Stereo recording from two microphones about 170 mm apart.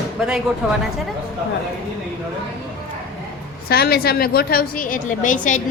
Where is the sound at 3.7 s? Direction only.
65° left (ahead or behind); by 5.6 s 50° left (ahead or behind).